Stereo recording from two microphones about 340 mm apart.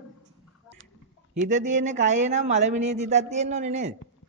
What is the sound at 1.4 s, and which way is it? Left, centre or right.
Speech, right.